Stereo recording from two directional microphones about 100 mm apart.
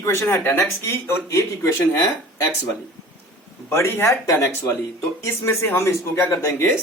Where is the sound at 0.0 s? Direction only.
25° left (ahead or behind).